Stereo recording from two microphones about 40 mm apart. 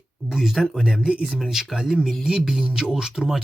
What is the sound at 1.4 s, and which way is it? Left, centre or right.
Speech, centre.